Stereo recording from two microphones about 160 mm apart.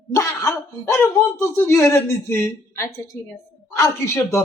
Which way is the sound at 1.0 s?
15° left (ahead or behind).